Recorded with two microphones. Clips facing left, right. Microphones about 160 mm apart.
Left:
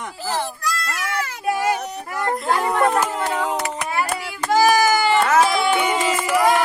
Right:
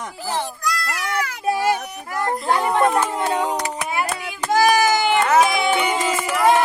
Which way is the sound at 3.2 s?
20° right (ahead or behind).